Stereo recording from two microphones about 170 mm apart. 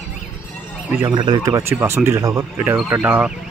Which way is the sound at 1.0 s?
25° right (ahead or behind).